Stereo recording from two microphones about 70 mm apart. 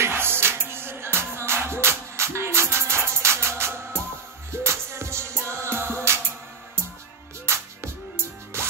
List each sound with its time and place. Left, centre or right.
0.0 s music: right